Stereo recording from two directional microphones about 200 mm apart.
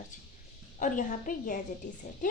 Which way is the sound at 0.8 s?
40° left (ahead or behind).